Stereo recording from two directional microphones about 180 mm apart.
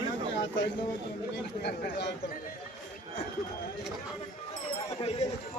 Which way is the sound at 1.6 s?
70° left (ahead or behind).